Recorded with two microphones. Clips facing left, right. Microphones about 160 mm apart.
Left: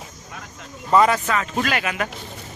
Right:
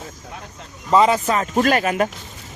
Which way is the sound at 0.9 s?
20° right (ahead or behind).